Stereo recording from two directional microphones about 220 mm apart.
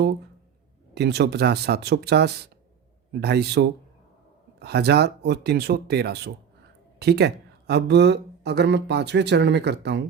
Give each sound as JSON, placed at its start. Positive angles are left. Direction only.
{"t": 0.9, "sound": "speech", "side_deg": -50}